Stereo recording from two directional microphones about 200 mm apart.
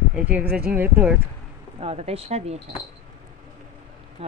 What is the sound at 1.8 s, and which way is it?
Speech, 30° right (ahead or behind).